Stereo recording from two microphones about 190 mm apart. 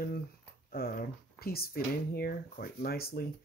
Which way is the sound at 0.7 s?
50° left (ahead or behind).